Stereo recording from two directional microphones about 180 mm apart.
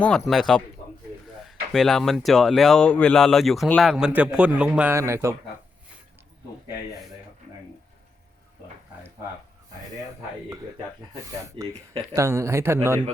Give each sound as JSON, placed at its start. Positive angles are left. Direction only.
{"t": 0.0, "sound": "speech", "side_deg": 5}
{"t": 1.7, "sound": "speech", "side_deg": 0}
{"t": 11.6, "sound": "speech", "side_deg": -30}
{"t": 12.1, "sound": "speech", "side_deg": -15}